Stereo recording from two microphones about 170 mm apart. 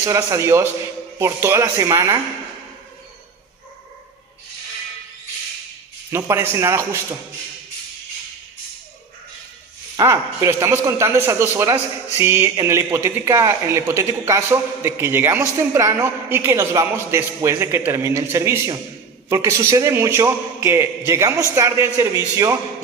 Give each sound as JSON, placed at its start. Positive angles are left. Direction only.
{"t": 0.0, "sound": "speech", "side_deg": -15}
{"t": 6.1, "sound": "speech", "side_deg": -15}
{"t": 10.0, "sound": "a man's voice", "side_deg": -20}